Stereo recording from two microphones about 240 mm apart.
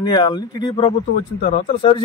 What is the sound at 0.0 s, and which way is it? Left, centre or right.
A man's voice, centre.